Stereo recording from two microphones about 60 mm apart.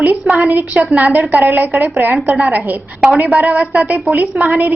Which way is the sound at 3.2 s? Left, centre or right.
Right.